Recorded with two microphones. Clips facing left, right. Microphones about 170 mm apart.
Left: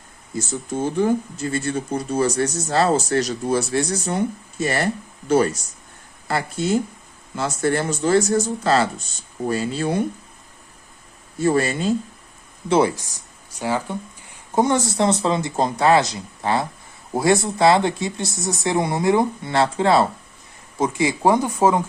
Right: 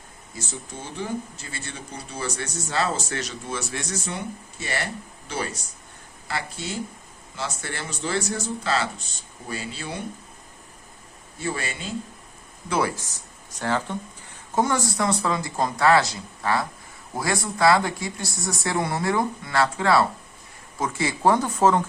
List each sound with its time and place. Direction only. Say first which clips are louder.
0.3 s speech: left 11 dB; 50° left (ahead or behind)
6.2 s speech: left 9 dB; 45° left (ahead or behind)
11.3 s speech: left 11 dB; 40° left (ahead or behind)
12.6 s speech: left 7 dB; 25° left (ahead or behind)